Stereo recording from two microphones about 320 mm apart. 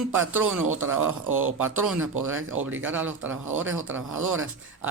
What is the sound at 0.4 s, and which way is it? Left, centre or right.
Speech, right.